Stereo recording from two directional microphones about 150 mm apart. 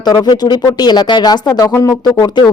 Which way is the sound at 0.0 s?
25° left (ahead or behind).